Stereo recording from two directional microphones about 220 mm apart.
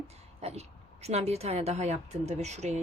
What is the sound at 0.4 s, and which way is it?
Speech, 30° right (ahead or behind).